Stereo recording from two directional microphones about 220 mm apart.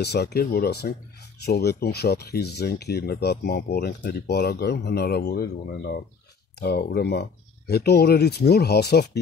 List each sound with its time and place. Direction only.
0.0 s speech: 50° left (ahead or behind)